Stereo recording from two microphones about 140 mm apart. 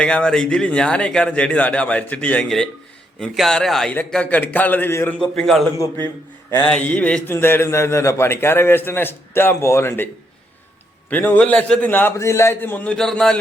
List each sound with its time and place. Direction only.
0.0 s a man's voice: 5° left (ahead or behind)
11.1 s a man's voice: 15° left (ahead or behind)